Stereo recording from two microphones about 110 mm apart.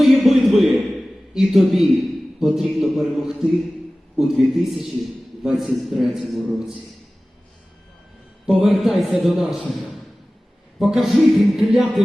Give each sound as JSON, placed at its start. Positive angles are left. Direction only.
{"t": 0.0, "sound": "a sound", "side_deg": 0}
{"t": 1.3, "sound": "a man's voice", "side_deg": 0}
{"t": 8.4, "sound": "a man's voice", "side_deg": 0}